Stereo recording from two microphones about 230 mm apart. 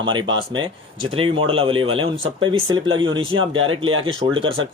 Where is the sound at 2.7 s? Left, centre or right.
Right.